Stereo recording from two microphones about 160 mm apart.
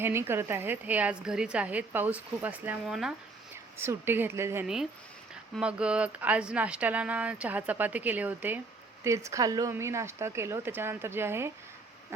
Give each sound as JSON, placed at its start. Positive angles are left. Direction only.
{"t": 0.0, "sound": "a woman's voice", "side_deg": -15}
{"t": 3.8, "sound": "a woman's voice", "side_deg": -15}
{"t": 4.6, "sound": "a woman's voice", "side_deg": -5}